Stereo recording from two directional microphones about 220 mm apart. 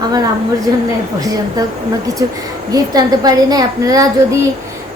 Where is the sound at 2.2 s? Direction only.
15° right (ahead or behind).